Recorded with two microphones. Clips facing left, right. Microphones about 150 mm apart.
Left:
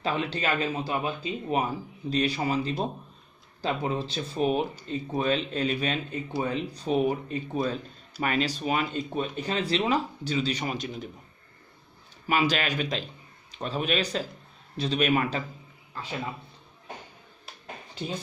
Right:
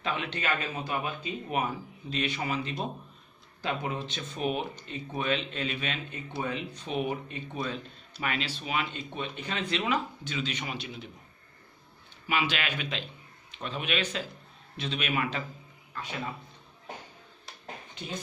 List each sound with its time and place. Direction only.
0.0 s speech: 35° left (ahead or behind)
12.3 s a man's voice: 40° left (ahead or behind)